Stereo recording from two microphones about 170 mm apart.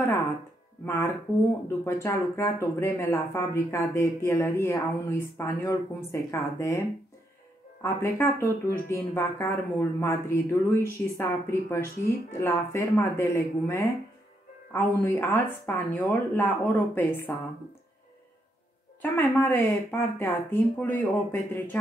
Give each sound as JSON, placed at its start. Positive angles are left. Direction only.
{"t": 0.8, "sound": "speech", "side_deg": 15}
{"t": 7.8, "sound": "speech", "side_deg": 15}
{"t": 19.4, "sound": "speech", "side_deg": 10}